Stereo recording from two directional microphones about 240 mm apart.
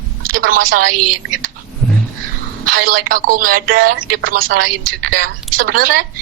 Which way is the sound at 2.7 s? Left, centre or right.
Right.